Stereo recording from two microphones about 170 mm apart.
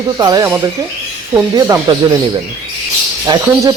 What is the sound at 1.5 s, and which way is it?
Speech, 20° right (ahead or behind).